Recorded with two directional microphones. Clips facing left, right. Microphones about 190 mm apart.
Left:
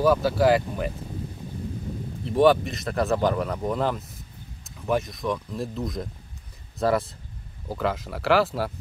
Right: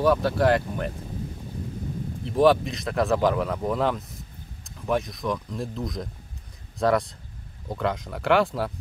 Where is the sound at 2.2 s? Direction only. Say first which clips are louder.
Left 1 dB; centre (ahead or behind).